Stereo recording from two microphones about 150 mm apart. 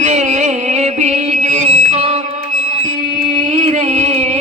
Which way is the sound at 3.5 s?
50° right (ahead or behind).